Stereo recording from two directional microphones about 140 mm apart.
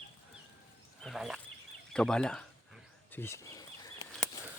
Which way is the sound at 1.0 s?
Centre (ahead or behind).